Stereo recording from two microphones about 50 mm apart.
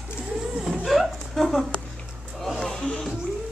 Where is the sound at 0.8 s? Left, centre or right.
Centre.